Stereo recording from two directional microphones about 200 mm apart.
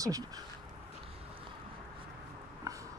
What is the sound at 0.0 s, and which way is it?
Speech, 15° right (ahead or behind).